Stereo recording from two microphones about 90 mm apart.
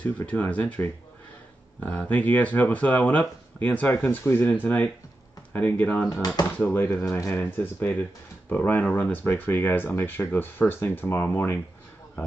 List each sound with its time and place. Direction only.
0.0 s speech: 15° left (ahead or behind)